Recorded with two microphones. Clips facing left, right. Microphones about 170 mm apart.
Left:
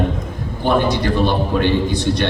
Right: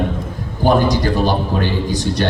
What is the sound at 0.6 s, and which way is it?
A man's voice, 40° right (ahead or behind).